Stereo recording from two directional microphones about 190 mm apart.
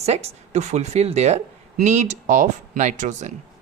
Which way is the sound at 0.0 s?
35° right (ahead or behind).